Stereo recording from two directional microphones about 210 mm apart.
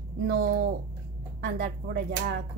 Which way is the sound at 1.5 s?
45° right (ahead or behind).